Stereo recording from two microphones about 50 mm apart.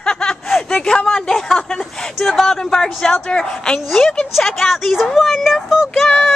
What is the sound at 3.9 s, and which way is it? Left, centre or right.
Speech, centre.